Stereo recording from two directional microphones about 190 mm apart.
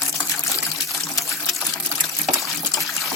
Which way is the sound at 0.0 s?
15° left (ahead or behind).